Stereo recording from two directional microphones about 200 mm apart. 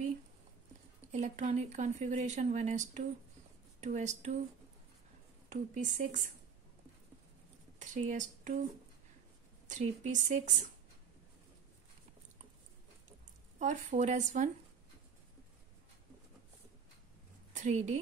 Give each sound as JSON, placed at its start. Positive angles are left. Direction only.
{"t": 1.1, "sound": "speech", "side_deg": -35}
{"t": 5.5, "sound": "speech", "side_deg": -40}
{"t": 7.8, "sound": "speech", "side_deg": -40}
{"t": 9.7, "sound": "speech", "side_deg": -35}
{"t": 13.6, "sound": "speech", "side_deg": -40}
{"t": 17.6, "sound": "a woman's voice", "side_deg": -35}